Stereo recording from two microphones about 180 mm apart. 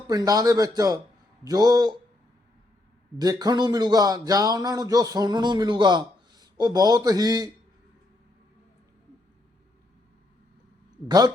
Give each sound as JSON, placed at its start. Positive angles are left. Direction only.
{"t": 0.1, "sound": "speech", "side_deg": -20}
{"t": 3.2, "sound": "speech", "side_deg": -20}